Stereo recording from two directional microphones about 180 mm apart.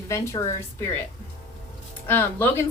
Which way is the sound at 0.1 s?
15° left (ahead or behind).